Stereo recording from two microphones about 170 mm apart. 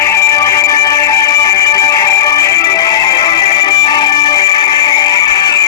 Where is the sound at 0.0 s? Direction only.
15° left (ahead or behind).